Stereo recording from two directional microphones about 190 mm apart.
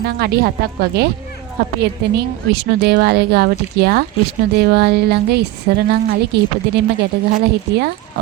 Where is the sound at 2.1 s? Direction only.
60° right (ahead or behind).